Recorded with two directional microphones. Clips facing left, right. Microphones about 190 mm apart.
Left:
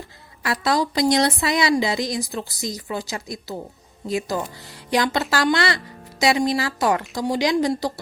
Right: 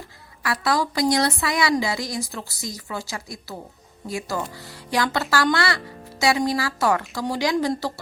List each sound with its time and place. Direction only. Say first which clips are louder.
0.4 s speech: left 2 dB; 20° left (ahead or behind)